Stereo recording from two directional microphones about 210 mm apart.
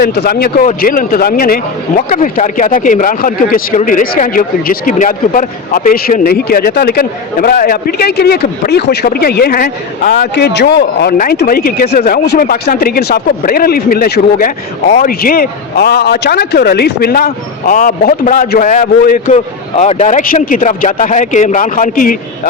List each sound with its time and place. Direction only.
0.0 s speech: 50° left (ahead or behind)